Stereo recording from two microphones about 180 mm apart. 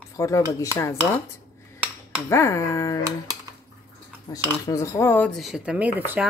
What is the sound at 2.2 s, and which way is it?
Speech, 15° left (ahead or behind).